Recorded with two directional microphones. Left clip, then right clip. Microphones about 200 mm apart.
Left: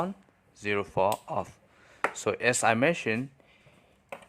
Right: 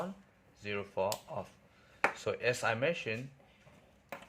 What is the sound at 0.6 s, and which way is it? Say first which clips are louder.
Speech: left 9 dB; 35° left (ahead or behind).